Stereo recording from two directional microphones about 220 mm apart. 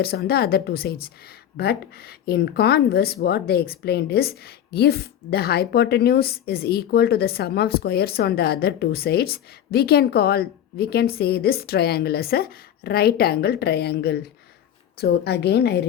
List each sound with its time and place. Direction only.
0.0 s speech: 45° left (ahead or behind)